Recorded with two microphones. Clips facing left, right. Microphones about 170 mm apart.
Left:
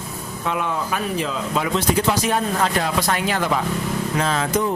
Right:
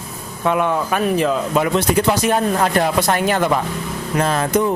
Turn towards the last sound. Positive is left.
turn(degrees=-55)  # may be behind; listen again after turning